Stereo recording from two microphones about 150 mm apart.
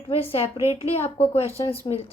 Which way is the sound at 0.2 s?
40° left (ahead or behind).